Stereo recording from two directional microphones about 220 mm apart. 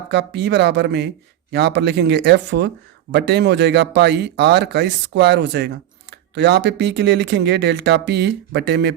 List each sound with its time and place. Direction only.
0.1 s speech: 50° right (ahead or behind)